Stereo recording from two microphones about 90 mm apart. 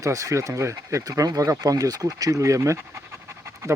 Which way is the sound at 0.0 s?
40° right (ahead or behind).